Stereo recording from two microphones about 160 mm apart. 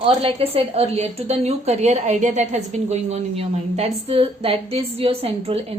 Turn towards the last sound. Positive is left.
turn(degrees=-40)  # may be behind; listen again after turning